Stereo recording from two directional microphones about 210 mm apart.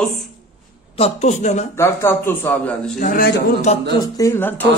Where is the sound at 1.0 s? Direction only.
30° left (ahead or behind).